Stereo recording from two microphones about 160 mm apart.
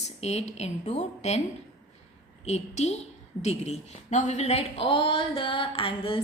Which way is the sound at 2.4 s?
45° left (ahead or behind).